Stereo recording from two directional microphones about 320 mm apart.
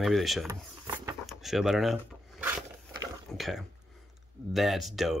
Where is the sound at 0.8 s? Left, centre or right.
Centre.